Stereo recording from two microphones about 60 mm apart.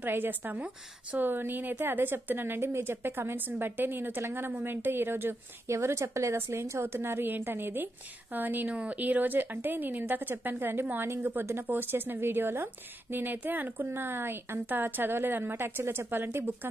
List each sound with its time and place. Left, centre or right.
0.0 s a woman's voice: right
5.7 s a woman's voice: right